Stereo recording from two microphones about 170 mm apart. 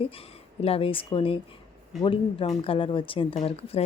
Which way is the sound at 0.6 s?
35° left (ahead or behind).